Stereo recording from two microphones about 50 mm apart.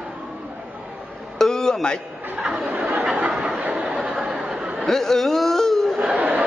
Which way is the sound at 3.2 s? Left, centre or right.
Centre.